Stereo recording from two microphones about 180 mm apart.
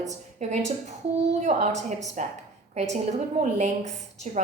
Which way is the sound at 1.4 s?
40° right (ahead or behind).